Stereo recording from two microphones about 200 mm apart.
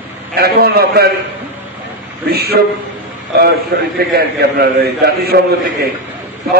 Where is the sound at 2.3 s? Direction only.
50° right (ahead or behind).